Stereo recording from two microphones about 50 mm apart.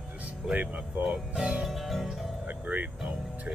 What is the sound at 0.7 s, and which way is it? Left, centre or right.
Speech, centre.